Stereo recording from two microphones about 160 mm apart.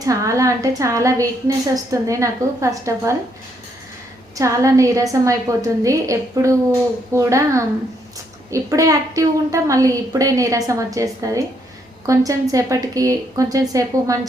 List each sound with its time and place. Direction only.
0.0 s a woman's voice: 20° right (ahead or behind)
4.4 s a woman's voice: 20° right (ahead or behind)